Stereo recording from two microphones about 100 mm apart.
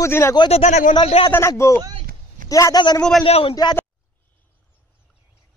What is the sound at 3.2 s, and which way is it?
Speech, 70° left (ahead or behind).